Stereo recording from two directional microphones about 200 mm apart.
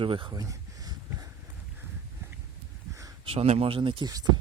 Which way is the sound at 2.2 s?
10° right (ahead or behind).